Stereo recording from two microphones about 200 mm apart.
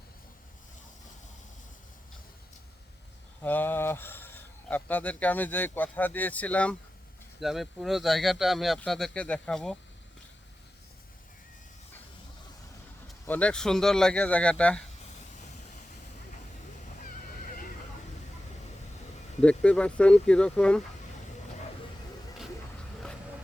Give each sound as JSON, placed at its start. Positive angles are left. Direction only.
{"t": 3.4, "sound": "speech", "side_deg": 10}
{"t": 13.2, "sound": "speech", "side_deg": 5}
{"t": 17.0, "sound": "a sound", "side_deg": 45}
{"t": 19.4, "sound": "speech", "side_deg": 5}